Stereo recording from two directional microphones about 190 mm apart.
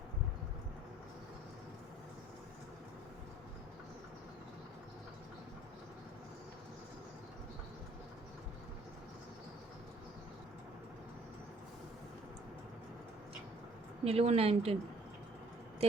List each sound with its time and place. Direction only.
14.0 s speech: 30° right (ahead or behind)